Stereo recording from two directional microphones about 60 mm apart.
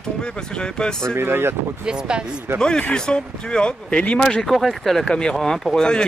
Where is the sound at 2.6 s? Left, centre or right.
Centre.